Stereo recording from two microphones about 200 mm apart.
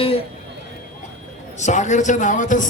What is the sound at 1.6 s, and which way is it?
A man's voice, 35° left (ahead or behind).